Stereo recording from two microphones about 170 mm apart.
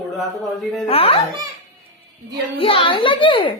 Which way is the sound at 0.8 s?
35° left (ahead or behind).